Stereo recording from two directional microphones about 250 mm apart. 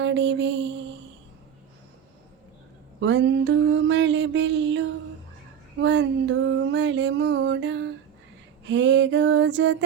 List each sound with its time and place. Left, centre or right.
0.0 s music: right
3.0 s music: right
5.8 s music: right